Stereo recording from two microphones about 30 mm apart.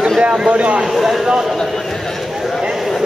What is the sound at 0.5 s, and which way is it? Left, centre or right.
Speech, right.